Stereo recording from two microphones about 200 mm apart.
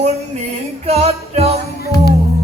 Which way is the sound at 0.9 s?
30° right (ahead or behind).